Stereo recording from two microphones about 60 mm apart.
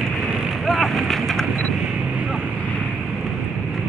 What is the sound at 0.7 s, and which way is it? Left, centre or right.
Vehicle, centre.